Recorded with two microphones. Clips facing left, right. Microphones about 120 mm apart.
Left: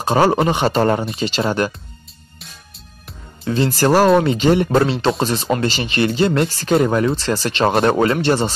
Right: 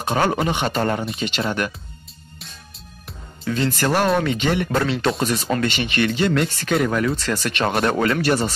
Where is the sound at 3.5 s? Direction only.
35° left (ahead or behind).